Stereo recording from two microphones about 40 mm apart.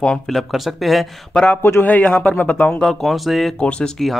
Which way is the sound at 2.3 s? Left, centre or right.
Left.